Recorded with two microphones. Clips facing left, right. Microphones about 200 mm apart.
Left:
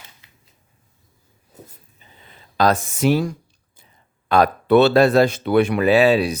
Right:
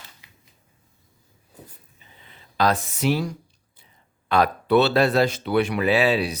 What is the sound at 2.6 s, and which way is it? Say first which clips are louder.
Speech: left 4 dB; 45° left (ahead or behind).